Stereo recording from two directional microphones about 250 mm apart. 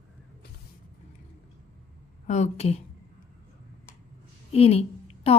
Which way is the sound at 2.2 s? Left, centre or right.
Left.